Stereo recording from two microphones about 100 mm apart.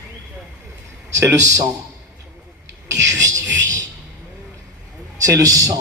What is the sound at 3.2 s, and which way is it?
Speech, 35° right (ahead or behind).